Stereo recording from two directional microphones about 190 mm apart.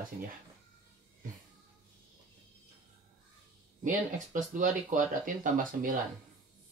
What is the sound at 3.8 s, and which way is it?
Speech, 40° right (ahead or behind).